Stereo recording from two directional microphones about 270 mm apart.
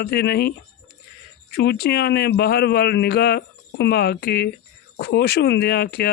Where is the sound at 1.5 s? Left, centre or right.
Left.